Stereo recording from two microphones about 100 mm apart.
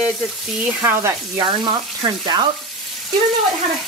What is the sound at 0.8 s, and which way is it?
Speech, 25° right (ahead or behind).